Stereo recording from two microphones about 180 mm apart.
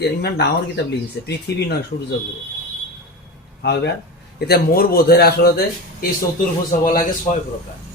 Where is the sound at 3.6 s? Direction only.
70° left (ahead or behind).